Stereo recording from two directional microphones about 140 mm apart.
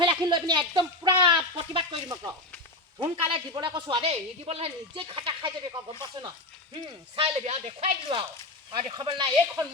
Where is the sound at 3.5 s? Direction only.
35° right (ahead or behind).